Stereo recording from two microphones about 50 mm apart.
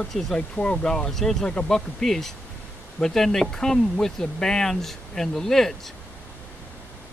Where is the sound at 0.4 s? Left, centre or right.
Left.